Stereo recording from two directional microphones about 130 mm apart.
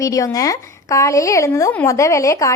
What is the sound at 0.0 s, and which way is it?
A woman's voice, 25° left (ahead or behind).